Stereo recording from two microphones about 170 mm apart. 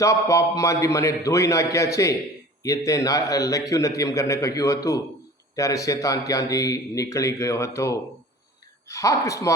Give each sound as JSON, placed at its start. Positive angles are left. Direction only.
{"t": 0.0, "sound": "a man's voice", "side_deg": 20}